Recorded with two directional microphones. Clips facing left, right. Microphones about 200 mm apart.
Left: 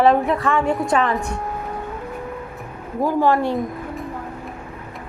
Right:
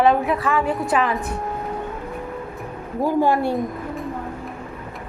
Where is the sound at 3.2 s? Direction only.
15° right (ahead or behind).